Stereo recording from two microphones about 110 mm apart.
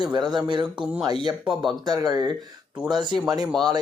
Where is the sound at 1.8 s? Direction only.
35° right (ahead or behind).